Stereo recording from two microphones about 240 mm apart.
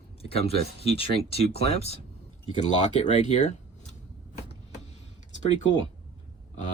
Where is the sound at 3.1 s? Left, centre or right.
Left.